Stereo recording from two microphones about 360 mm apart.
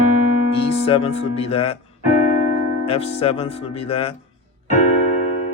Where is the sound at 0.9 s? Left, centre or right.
Centre.